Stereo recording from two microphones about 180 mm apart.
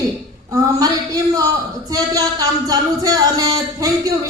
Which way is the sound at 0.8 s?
20° right (ahead or behind).